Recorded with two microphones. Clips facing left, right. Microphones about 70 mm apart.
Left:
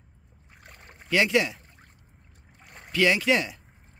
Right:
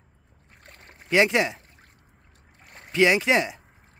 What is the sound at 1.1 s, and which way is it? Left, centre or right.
Speech, right.